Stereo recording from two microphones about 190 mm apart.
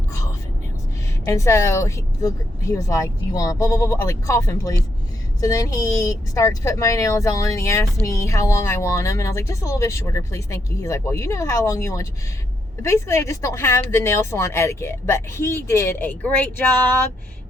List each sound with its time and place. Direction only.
1.2 s speech: 15° left (ahead or behind)